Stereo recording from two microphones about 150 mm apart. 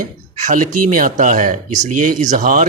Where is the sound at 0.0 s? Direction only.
60° right (ahead or behind).